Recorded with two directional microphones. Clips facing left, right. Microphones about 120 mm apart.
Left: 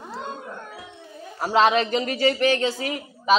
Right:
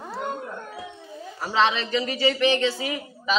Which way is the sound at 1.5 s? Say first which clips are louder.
Left 4 dB; 45° left (ahead or behind).